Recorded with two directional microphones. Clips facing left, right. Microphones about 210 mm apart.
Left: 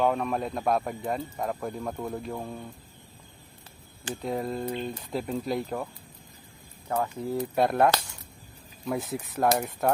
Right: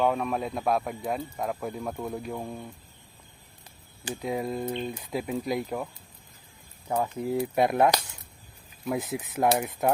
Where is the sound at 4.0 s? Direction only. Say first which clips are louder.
Even; 10° right (ahead or behind).